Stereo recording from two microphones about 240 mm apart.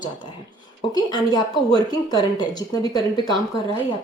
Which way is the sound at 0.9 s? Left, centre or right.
Centre.